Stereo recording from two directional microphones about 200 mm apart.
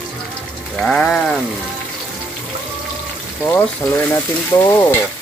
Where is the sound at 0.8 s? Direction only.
Centre (ahead or behind).